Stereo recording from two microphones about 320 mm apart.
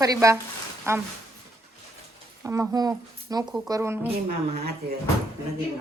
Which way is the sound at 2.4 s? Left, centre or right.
Centre.